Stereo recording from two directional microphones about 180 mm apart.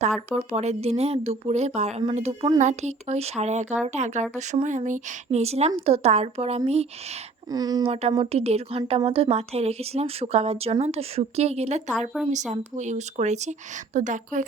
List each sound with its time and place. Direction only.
0.3 s a woman's voice: 40° right (ahead or behind)
7.5 s speech: 20° right (ahead or behind)
8.2 s a woman's voice: 35° right (ahead or behind)